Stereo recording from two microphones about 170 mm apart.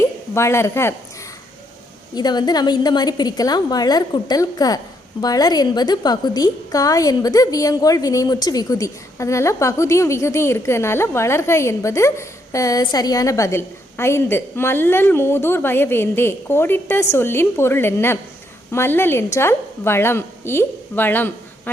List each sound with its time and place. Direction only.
0.0 s speech: 15° left (ahead or behind)
2.1 s a woman's voice: 25° left (ahead or behind)